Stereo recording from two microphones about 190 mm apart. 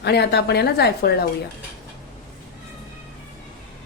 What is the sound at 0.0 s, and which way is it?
A woman's voice, 60° left (ahead or behind).